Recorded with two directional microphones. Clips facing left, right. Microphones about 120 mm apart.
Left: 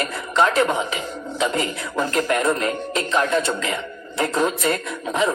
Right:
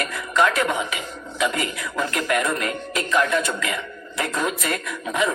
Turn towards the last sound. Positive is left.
turn(degrees=30)  # may be behind; listen again after turning